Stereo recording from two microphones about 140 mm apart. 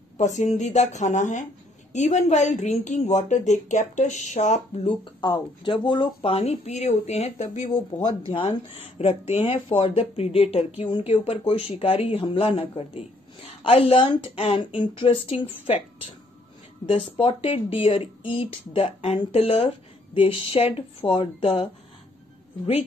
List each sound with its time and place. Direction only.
0.2 s a woman's voice: 55° left (ahead or behind)
4.8 s speech: 35° left (ahead or behind); by 7.6 s 50° left (ahead or behind)
7.7 s speech: 35° left (ahead or behind)
8.3 s speech: 50° left (ahead or behind)
17.0 s speech: 40° left (ahead or behind)